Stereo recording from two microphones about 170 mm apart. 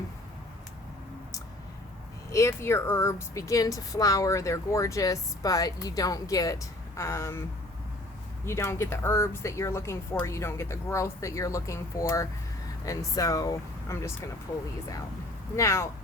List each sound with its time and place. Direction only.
2.3 s speech: 15° left (ahead or behind)
8.4 s speech: 15° left (ahead or behind)
15.5 s speech: 15° left (ahead or behind)